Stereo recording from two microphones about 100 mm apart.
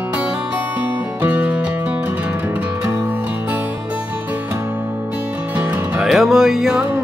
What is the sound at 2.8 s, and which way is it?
Music, 30° right (ahead or behind).